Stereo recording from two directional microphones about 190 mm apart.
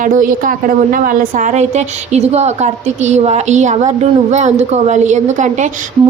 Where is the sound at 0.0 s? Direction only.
45° right (ahead or behind).